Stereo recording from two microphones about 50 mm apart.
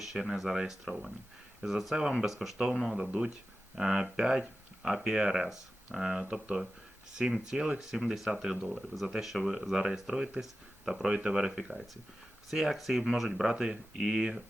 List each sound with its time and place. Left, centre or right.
0.0 s speech: centre
3.1 s speech: right